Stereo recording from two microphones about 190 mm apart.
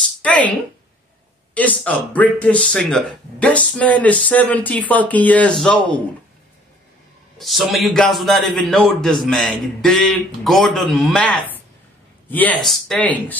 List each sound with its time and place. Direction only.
0.0 s a sound: 5° left (ahead or behind)
1.5 s speech: 5° left (ahead or behind)
7.3 s a man's voice: centre (ahead or behind)